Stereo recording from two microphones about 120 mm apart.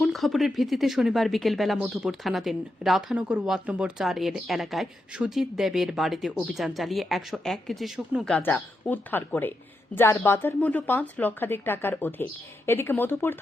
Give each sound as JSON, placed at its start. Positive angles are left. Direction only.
{"t": 0.0, "sound": "speech", "side_deg": 0}
{"t": 8.4, "sound": "a woman's voice", "side_deg": 15}